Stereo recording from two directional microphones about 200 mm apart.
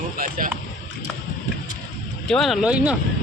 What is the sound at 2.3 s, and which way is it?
Speech, centre (ahead or behind).